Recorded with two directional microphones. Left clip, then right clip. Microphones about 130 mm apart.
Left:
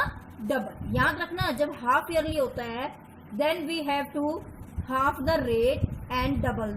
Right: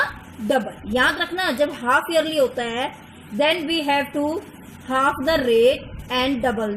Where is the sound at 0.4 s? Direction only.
45° right (ahead or behind).